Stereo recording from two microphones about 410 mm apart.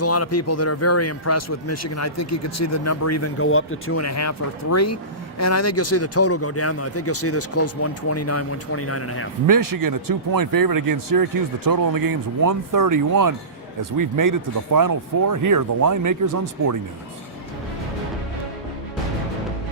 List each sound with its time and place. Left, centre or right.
0.0 s a man's voice: left
9.5 s speech: right